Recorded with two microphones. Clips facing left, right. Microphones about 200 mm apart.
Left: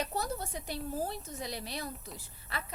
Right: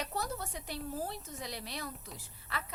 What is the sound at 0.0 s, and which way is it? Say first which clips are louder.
Speech: left 3 dB; 35° left (ahead or behind).